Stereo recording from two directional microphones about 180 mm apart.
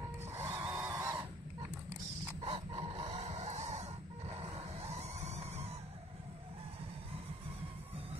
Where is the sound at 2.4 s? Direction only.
30° right (ahead or behind).